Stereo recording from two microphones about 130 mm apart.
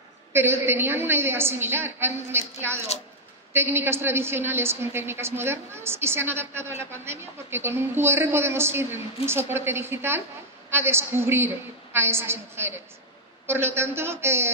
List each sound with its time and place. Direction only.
0.3 s a woman's voice: 20° right (ahead or behind)